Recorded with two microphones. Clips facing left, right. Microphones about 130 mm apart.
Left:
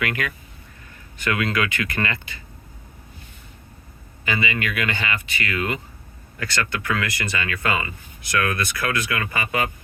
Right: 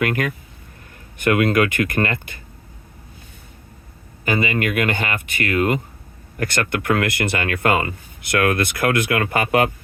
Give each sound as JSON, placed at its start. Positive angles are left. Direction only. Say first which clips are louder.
{"t": 0.0, "sound": "speech", "louder": "right 5 dB", "side_deg": -45}
{"t": 4.3, "sound": "speech", "louder": "right 5 dB", "side_deg": -45}